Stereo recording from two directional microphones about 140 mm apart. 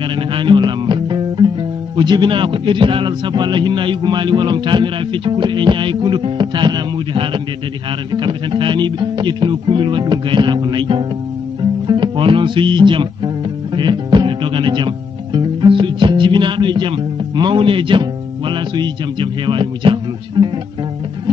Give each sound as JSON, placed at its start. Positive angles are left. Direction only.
{"t": 0.1, "sound": "music", "side_deg": -35}
{"t": 2.0, "sound": "a man's voice", "side_deg": -35}